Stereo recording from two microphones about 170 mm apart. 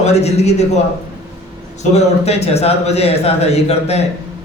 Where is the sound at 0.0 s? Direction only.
40° left (ahead or behind).